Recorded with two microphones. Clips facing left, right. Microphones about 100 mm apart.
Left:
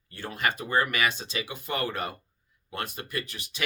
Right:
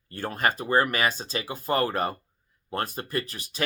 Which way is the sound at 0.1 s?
45° right (ahead or behind).